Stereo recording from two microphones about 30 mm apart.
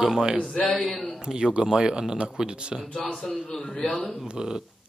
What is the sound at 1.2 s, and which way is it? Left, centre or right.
A man's voice, right.